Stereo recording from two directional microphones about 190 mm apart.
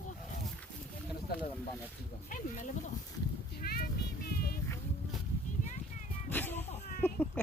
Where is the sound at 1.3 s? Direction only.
55° left (ahead or behind).